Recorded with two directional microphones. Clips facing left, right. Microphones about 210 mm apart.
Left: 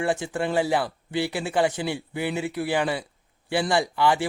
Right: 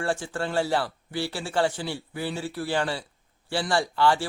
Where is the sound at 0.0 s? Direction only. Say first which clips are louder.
Left 3 dB; 20° left (ahead or behind).